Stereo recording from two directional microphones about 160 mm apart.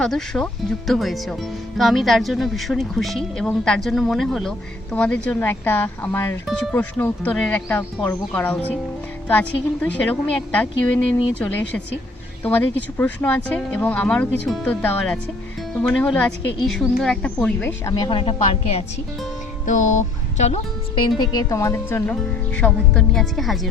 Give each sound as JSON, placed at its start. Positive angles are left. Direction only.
{"t": 0.0, "sound": "speech", "side_deg": 5}
{"t": 17.8, "sound": "a woman's voice", "side_deg": 25}
{"t": 19.6, "sound": "speech", "side_deg": 55}
{"t": 21.2, "sound": "speech", "side_deg": 25}